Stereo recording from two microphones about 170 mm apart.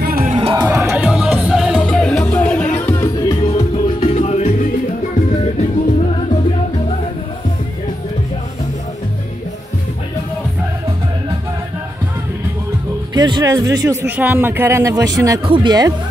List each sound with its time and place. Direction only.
0.0 s music: 60° right (ahead or behind)
0.3 s music: 35° right (ahead or behind)
0.6 s music: 15° right (ahead or behind); by 3.3 s 15° left (ahead or behind)
3.3 s music: 30° left (ahead or behind)
13.1 s speech: 25° right (ahead or behind)
14.0 s speech: 10° right (ahead or behind)